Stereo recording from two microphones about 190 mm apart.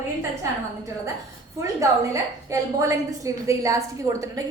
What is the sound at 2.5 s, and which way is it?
A woman's voice, 15° right (ahead or behind).